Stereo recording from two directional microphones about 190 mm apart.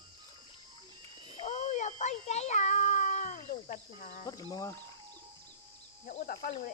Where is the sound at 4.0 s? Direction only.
45° left (ahead or behind).